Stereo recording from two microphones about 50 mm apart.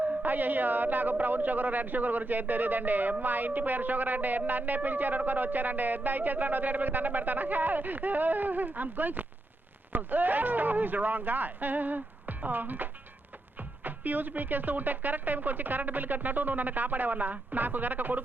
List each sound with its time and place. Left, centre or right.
0.0 s a man's voice: right